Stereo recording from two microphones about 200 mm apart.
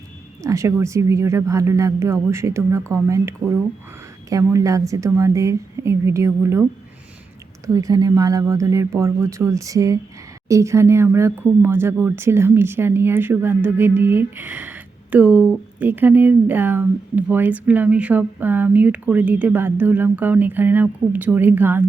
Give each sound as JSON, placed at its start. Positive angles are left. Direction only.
{"t": 0.4, "sound": "speech", "side_deg": -15}
{"t": 7.7, "sound": "speech", "side_deg": -20}